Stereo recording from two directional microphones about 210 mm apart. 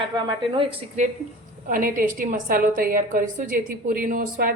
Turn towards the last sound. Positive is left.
turn(degrees=-40)  # may be behind; listen again after turning